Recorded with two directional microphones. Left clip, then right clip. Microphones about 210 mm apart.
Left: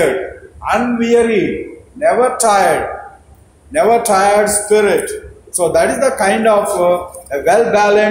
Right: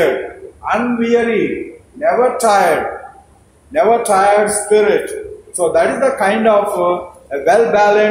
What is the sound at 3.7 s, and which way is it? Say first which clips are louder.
A man's voice: even; 25° left (ahead or behind).